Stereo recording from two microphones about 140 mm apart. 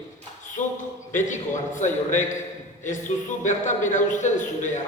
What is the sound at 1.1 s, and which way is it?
A man's voice, 60° left (ahead or behind).